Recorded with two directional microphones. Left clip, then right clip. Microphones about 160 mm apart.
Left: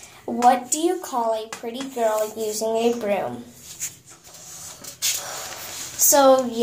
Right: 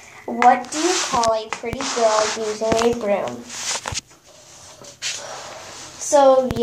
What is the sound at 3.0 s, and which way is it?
Speech, 5° left (ahead or behind).